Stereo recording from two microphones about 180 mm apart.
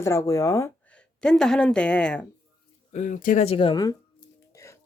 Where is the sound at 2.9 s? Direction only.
45° left (ahead or behind); by 4.8 s 15° left (ahead or behind).